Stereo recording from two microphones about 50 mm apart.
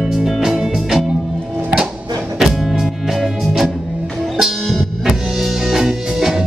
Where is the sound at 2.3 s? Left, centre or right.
Centre.